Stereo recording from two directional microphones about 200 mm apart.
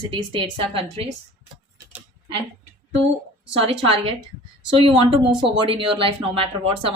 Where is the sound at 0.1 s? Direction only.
25° right (ahead or behind).